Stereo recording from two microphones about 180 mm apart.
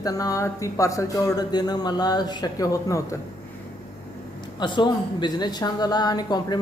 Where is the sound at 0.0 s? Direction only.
20° left (ahead or behind).